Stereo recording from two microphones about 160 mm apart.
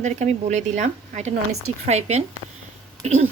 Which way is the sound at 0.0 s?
45° right (ahead or behind).